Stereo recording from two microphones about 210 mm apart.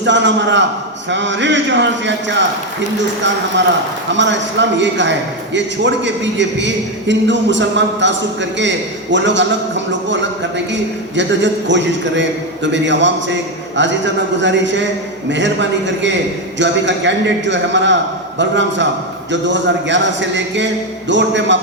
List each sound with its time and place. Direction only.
0.0 s a man's voice: 60° right (ahead or behind)
4.1 s a man's voice: 60° right (ahead or behind)
16.6 s a man's voice: 60° right (ahead or behind)